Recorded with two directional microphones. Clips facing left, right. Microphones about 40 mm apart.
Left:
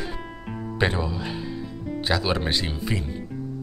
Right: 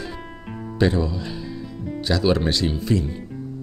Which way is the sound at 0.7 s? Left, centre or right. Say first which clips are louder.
Right 4 dB; left.